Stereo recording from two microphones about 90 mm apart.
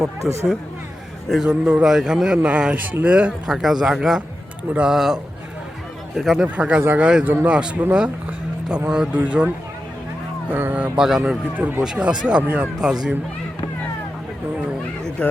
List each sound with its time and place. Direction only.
0.2 s a man's voice: 5° right (ahead or behind)
10.5 s a man's voice: 20° right (ahead or behind)
15.2 s speech: 10° left (ahead or behind)